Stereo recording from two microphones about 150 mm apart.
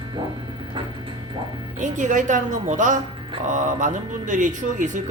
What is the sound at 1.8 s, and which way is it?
A man's voice, 55° right (ahead or behind).